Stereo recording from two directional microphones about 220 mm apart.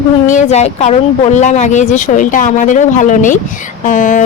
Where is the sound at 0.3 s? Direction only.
35° left (ahead or behind).